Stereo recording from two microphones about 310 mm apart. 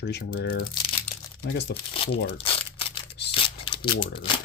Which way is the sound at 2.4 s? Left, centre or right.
Centre.